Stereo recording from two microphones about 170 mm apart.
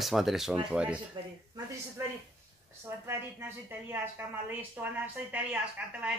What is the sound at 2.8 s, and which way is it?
A woman's voice, 15° right (ahead or behind).